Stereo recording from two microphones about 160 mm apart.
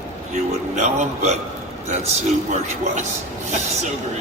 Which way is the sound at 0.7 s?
50° right (ahead or behind).